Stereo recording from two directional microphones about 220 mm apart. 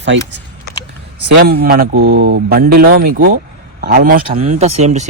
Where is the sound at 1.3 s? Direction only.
45° right (ahead or behind).